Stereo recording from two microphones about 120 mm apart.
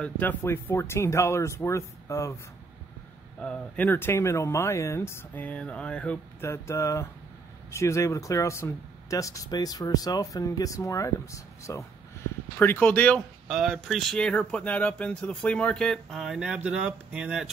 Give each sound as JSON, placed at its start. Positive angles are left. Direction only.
{"t": 0.0, "sound": "speech", "side_deg": 15}
{"t": 3.3, "sound": "speech", "side_deg": 10}
{"t": 6.4, "sound": "speech", "side_deg": 25}
{"t": 12.5, "sound": "speech", "side_deg": 15}
{"t": 13.5, "sound": "speech", "side_deg": 0}